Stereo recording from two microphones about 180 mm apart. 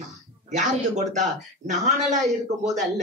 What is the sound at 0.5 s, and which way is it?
Speech, 40° right (ahead or behind).